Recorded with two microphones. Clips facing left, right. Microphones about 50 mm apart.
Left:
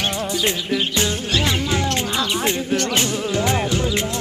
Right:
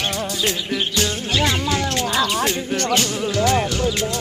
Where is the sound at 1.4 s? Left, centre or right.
Centre.